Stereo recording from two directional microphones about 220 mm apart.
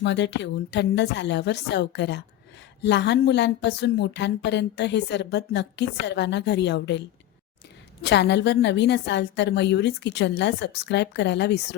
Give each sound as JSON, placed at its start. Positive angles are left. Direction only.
{"t": 0.0, "sound": "speech", "side_deg": 50}
{"t": 8.0, "sound": "speech", "side_deg": 50}